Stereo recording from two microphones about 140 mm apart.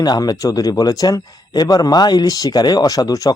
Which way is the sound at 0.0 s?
30° left (ahead or behind).